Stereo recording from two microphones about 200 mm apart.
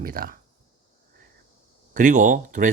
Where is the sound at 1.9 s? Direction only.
40° right (ahead or behind).